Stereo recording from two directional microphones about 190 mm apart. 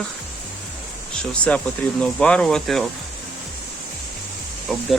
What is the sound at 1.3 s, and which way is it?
Speech, 5° left (ahead or behind).